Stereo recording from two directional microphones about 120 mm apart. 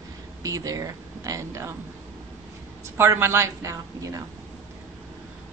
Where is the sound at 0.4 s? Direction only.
30° right (ahead or behind).